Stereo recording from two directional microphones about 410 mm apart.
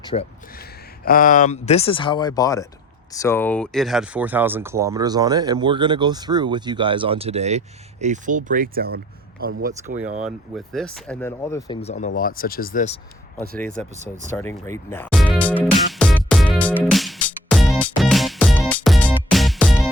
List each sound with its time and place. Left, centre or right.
0.0 s speech: centre; by 9.7 s right
10.2 s speech: centre
13.5 s speech: centre
14.3 s music: centre